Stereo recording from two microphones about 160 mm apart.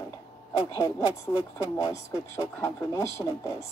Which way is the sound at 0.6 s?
20° left (ahead or behind).